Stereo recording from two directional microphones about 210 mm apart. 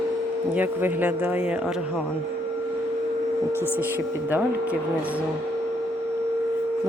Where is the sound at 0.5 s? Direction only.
10° right (ahead or behind).